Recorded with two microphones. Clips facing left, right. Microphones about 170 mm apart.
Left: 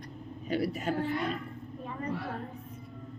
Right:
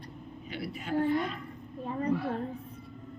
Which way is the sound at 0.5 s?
40° left (ahead or behind).